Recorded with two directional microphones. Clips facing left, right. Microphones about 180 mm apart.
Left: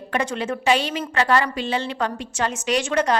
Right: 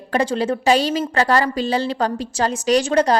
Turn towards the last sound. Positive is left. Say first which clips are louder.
# right 5 dB
turn(degrees=-35)  # may be behind; listen again after turning